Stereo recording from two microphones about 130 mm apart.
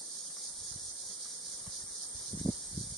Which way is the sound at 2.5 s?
Centre (ahead or behind).